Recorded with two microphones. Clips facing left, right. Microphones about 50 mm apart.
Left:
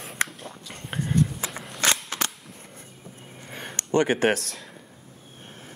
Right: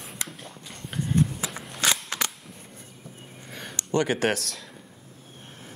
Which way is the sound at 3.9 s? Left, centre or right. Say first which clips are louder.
Left 3 dB; left.